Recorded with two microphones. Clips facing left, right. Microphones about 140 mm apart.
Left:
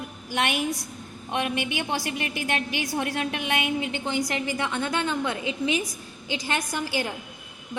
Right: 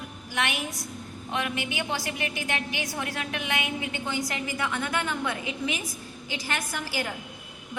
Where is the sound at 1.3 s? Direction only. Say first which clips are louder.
Left 3 dB; 25° left (ahead or behind).